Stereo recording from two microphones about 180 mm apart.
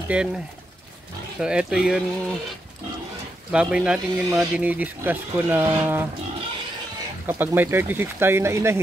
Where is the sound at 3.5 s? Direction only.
5° right (ahead or behind).